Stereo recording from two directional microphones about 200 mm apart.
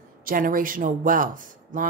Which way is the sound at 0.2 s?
45° right (ahead or behind).